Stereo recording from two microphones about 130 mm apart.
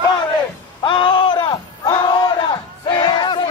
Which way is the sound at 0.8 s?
40° left (ahead or behind).